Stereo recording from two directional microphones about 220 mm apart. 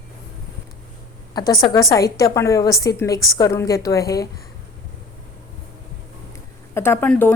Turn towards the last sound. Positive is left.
turn(degrees=5)  # may be behind; listen again after turning